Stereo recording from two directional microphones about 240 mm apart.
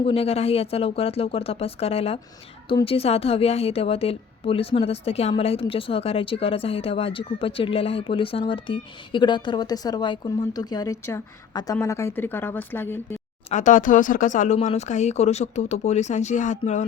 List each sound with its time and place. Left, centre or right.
0.0 s a woman's voice: left; by 13.1 s centre
13.5 s a woman's voice: left